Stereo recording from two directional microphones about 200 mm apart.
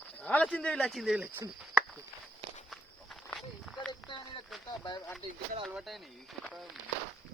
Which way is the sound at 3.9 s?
25° left (ahead or behind).